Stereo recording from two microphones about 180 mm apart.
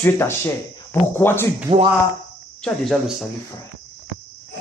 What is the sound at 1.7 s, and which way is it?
Speech, 25° right (ahead or behind).